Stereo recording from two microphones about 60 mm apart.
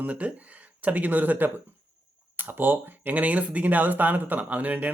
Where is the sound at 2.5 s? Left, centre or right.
Right.